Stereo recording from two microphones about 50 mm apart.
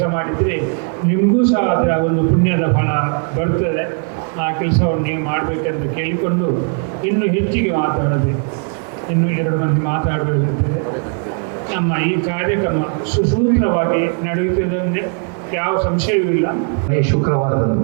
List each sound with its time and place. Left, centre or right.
0.0 s a man's voice: right
9.2 s a man's voice: right
11.7 s a man's voice: right